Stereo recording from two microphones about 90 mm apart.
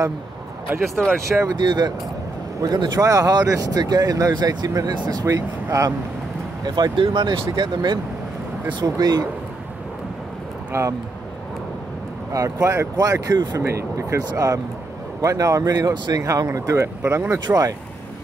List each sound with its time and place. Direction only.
0.7 s speech: 25° right (ahead or behind)
1.5 s speech: 55° right (ahead or behind)
5.2 s speech: 35° right (ahead or behind)
6.6 s speech: 55° right (ahead or behind)
10.7 s speech: 35° right (ahead or behind)
12.3 s speech: 40° right (ahead or behind)
13.6 s speech: 35° right (ahead or behind)